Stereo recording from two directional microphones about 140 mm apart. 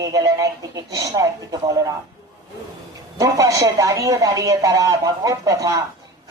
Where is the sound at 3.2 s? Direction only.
20° right (ahead or behind).